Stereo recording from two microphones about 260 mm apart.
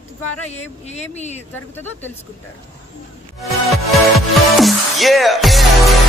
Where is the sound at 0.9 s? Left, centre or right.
Left.